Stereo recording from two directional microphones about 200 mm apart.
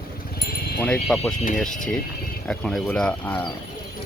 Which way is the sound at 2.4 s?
5° left (ahead or behind).